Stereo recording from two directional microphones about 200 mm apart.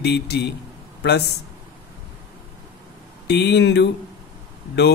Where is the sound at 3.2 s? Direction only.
55° left (ahead or behind).